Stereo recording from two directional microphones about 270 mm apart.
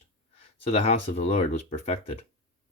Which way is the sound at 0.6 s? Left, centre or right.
Left.